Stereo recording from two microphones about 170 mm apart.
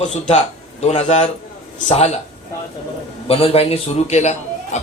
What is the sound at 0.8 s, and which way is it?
A man's voice, 40° left (ahead or behind).